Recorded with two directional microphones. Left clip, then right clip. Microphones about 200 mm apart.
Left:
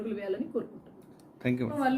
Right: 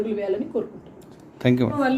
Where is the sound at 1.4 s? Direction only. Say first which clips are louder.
Right 10 dB; 35° right (ahead or behind).